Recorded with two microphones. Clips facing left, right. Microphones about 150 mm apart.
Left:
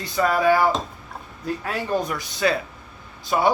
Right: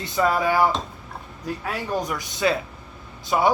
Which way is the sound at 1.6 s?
15° right (ahead or behind).